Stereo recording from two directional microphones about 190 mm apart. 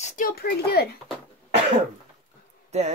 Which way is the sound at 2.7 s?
35° right (ahead or behind).